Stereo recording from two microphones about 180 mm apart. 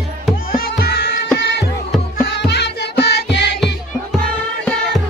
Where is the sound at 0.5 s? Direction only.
60° left (ahead or behind).